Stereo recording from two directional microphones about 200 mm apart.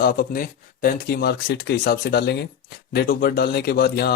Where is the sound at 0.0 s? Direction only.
50° left (ahead or behind).